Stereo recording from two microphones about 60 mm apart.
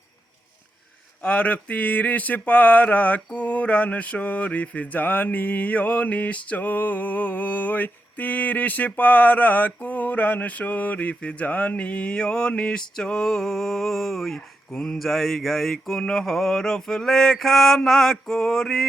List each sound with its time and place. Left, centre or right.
1.2 s mantra: left